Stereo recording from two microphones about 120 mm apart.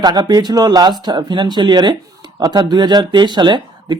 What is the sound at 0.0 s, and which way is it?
Speech, 35° right (ahead or behind).